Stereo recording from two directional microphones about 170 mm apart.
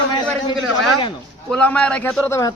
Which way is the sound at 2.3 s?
20° left (ahead or behind).